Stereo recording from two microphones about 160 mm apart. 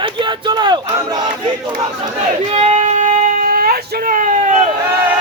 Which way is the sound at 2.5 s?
45° right (ahead or behind).